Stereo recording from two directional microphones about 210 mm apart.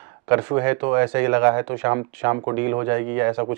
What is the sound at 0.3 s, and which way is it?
Speech, 15° right (ahead or behind).